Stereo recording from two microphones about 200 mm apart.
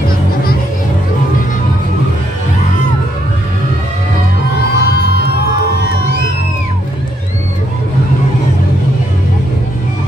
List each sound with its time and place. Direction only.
4.6 s music: 55° left (ahead or behind)